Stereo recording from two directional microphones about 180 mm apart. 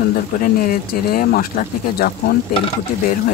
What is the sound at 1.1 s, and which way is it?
Speech, 50° left (ahead or behind).